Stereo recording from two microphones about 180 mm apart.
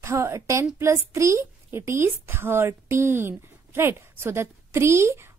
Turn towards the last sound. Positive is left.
turn(degrees=-15)  # may be behind; listen again after turning